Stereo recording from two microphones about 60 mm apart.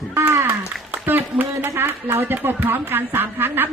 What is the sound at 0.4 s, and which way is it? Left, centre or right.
A man's voice, right.